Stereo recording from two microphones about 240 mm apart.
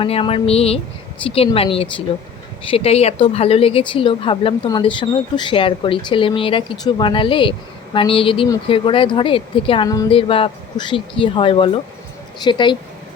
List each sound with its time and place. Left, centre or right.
0.0 s a woman's voice: left